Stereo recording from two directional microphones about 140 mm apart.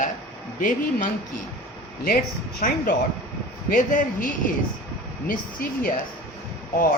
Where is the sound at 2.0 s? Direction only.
85° left.